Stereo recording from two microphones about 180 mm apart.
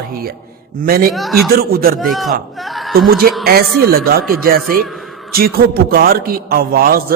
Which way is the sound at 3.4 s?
60° right (ahead or behind).